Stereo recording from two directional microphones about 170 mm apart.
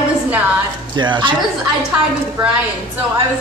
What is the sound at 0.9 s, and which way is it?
Speech, 25° right (ahead or behind).